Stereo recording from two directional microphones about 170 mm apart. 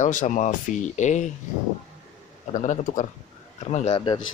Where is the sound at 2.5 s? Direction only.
45° left (ahead or behind); by 4.2 s 30° left (ahead or behind).